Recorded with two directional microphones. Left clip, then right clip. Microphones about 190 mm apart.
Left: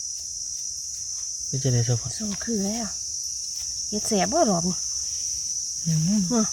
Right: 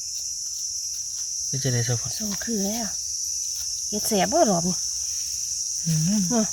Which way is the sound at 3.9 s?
5° right (ahead or behind).